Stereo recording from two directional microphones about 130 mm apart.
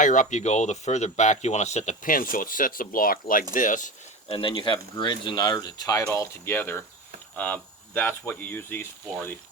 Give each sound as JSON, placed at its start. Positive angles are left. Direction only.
{"t": 0.0, "sound": "speech", "side_deg": 75}
{"t": 4.3, "sound": "speech", "side_deg": 40}